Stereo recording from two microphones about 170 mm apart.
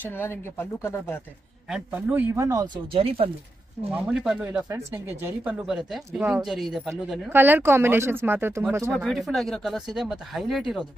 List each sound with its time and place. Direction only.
0.0 s speech: 15° left (ahead or behind)
1.7 s speech: 5° right (ahead or behind); by 3.3 s 35° right (ahead or behind)
3.9 s speech: 5° right (ahead or behind)
7.3 s speech: 10° right (ahead or behind)
8.9 s speech: centre (ahead or behind)